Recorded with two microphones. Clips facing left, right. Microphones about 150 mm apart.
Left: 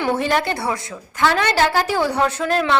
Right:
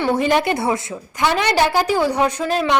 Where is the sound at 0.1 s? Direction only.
15° right (ahead or behind).